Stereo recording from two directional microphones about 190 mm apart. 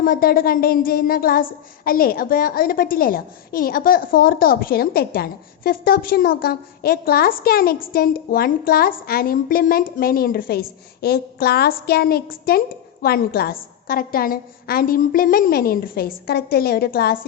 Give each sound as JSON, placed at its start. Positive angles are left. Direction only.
{"t": 0.0, "sound": "a woman's voice", "side_deg": 50}